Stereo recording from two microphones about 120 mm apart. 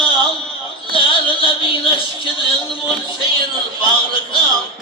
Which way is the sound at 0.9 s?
45° left (ahead or behind).